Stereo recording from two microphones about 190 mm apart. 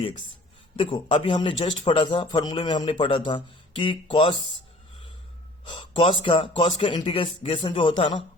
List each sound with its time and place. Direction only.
0.8 s speech: 25° left (ahead or behind)
5.6 s speech: 25° left (ahead or behind)